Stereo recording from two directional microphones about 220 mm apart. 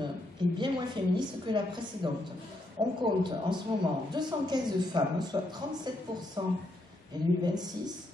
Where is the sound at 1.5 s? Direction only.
20° right (ahead or behind).